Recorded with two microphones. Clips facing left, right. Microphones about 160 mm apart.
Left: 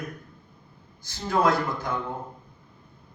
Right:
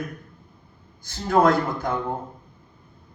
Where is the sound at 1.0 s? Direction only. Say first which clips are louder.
Right 5 dB; 50° right (ahead or behind).